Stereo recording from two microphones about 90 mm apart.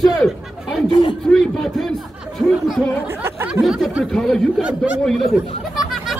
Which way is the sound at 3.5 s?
Centre (ahead or behind).